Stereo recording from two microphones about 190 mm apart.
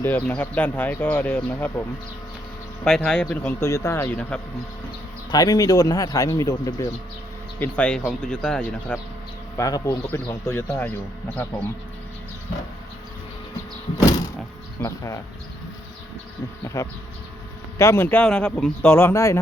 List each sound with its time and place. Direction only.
0.0 s speech: 10° left (ahead or behind)
2.8 s speech: 5° left (ahead or behind)
5.3 s speech: 20° left (ahead or behind)
7.6 s speech: 5° left (ahead or behind)
9.6 s speech: 20° left (ahead or behind)
14.8 s speech: 15° left (ahead or behind)
16.6 s speech: 15° left (ahead or behind)